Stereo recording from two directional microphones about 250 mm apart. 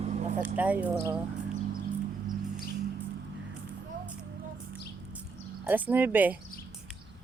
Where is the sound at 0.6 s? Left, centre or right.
Centre.